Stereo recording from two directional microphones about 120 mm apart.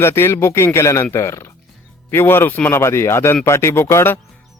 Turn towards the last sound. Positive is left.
turn(degrees=20)  # may be behind; listen again after turning